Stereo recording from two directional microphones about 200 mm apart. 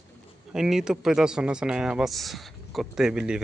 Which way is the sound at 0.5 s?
5° right (ahead or behind).